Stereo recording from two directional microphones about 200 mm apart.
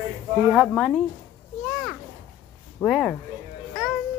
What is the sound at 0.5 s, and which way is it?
Speech, 5° right (ahead or behind).